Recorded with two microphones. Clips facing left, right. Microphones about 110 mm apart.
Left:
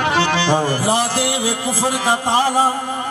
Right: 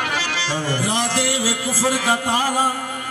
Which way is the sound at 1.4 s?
25° left (ahead or behind).